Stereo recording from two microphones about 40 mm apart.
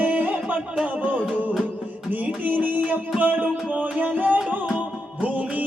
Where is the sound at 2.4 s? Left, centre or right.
Right.